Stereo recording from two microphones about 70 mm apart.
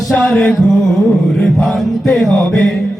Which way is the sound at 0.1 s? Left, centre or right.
Centre.